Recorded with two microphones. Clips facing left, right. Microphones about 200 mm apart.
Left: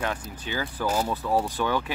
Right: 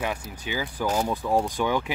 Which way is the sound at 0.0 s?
10° right (ahead or behind).